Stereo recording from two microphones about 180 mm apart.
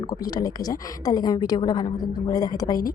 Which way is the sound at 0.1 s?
20° left (ahead or behind).